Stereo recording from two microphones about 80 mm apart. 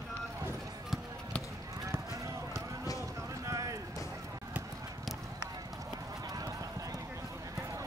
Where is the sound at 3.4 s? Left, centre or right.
Right.